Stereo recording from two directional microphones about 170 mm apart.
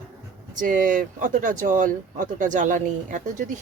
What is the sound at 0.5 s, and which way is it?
Speech, 50° right (ahead or behind).